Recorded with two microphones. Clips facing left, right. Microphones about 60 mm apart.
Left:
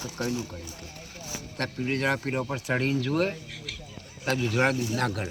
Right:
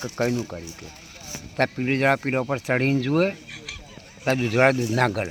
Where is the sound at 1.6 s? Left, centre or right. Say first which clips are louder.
Right 7 dB; right.